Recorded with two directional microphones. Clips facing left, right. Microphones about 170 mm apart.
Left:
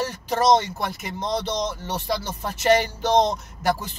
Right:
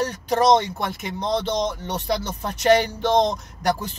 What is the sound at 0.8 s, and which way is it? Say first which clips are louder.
Speech: right 2 dB; centre (ahead or behind).